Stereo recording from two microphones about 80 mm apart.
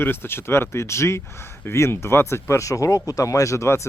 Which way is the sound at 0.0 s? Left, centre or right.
Left.